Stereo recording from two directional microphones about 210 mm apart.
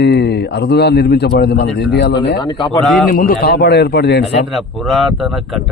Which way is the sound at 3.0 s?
40° left (ahead or behind).